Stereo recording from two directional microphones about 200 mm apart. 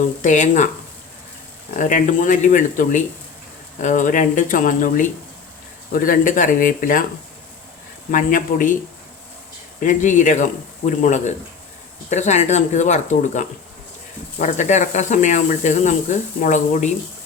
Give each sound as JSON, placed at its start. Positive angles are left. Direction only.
{"t": 0.0, "sound": "speech", "side_deg": 40}
{"t": 1.8, "sound": "speech", "side_deg": 40}
{"t": 8.1, "sound": "speech", "side_deg": 40}
{"t": 9.8, "sound": "speech", "side_deg": 40}